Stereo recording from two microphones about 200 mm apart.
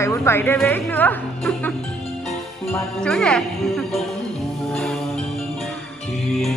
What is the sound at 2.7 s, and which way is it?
Music, 5° left (ahead or behind).